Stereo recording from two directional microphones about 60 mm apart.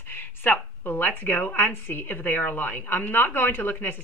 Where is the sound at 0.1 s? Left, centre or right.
Left.